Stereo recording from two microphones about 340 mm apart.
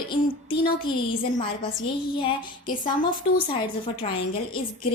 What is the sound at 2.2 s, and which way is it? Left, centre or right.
A woman's voice, left.